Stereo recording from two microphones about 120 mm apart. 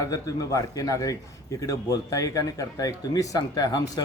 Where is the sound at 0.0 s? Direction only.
30° left (ahead or behind).